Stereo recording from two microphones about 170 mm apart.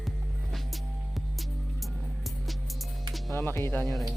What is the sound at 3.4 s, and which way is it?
Speech, 15° left (ahead or behind).